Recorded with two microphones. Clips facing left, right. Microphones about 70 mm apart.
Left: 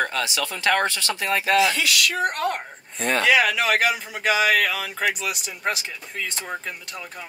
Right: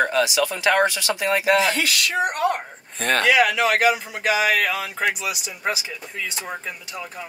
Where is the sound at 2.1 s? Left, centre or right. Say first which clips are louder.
Right 2 dB; centre.